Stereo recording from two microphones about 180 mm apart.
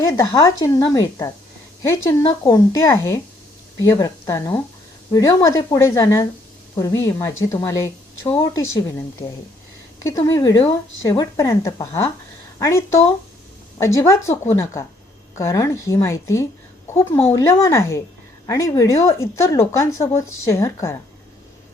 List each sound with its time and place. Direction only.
0.0 s a woman's voice: 20° left (ahead or behind)
10.0 s a woman's voice: 15° left (ahead or behind)